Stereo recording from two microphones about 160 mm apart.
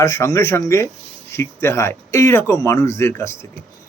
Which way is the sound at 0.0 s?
20° left (ahead or behind).